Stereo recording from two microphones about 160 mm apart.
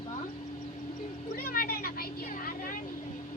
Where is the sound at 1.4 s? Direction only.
75° left (ahead or behind).